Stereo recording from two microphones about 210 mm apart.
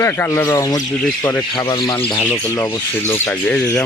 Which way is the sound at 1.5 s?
20° left (ahead or behind).